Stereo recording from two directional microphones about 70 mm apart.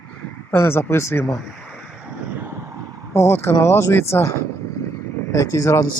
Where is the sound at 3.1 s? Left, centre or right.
Left.